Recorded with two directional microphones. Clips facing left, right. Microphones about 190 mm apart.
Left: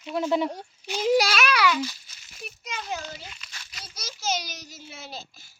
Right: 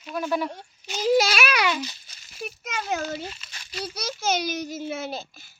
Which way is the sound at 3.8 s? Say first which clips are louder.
Right 5 dB; 60° right (ahead or behind).